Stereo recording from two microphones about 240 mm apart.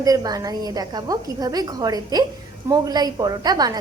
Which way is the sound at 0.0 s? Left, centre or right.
Centre.